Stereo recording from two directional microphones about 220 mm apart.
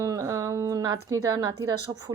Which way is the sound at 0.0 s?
15° right (ahead or behind).